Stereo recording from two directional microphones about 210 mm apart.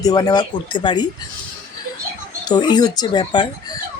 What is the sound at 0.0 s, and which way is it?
Speech, 20° left (ahead or behind).